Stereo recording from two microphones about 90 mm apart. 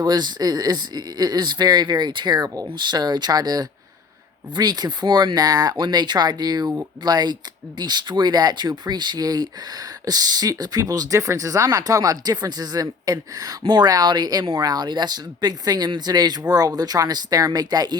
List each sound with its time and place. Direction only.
0.0 s speech: 50° right (ahead or behind)